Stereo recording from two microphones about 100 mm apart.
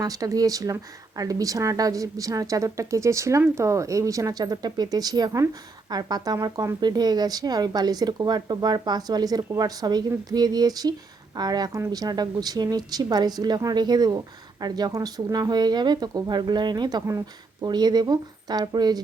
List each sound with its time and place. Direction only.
0.0 s speech: 35° right (ahead or behind)
17.1 s speech: 30° right (ahead or behind)
17.7 s speech: 45° right (ahead or behind)